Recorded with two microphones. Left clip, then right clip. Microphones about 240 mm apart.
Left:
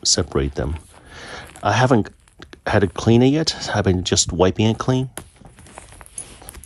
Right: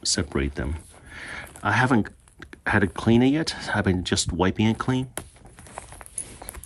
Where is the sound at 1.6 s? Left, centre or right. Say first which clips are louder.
Left 5 dB; centre.